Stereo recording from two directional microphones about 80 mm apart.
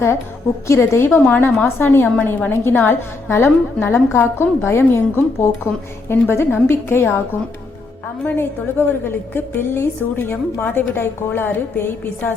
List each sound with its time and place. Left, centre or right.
0.7 s a woman's voice: left
8.2 s a woman's voice: left